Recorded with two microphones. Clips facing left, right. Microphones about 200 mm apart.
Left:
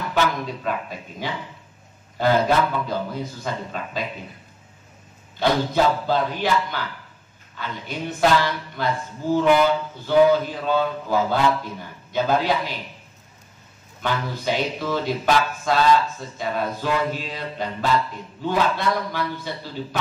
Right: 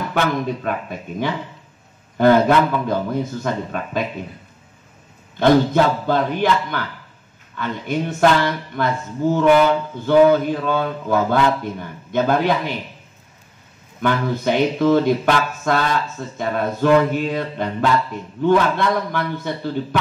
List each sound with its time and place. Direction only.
0.1 s speech: 55° right (ahead or behind)
5.4 s speech: 55° right (ahead or behind)
14.0 s a man's voice: 55° right (ahead or behind)